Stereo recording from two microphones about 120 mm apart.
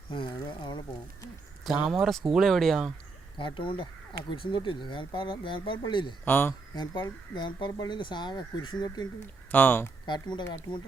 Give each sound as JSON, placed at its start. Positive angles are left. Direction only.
{"t": 0.1, "sound": "speech", "side_deg": 40}
{"t": 1.6, "sound": "speech", "side_deg": -5}
{"t": 3.3, "sound": "speech", "side_deg": 45}
{"t": 6.2, "sound": "speech", "side_deg": 20}
{"t": 6.7, "sound": "speech", "side_deg": 40}
{"t": 9.5, "sound": "speech", "side_deg": 15}
{"t": 10.1, "sound": "speech", "side_deg": 40}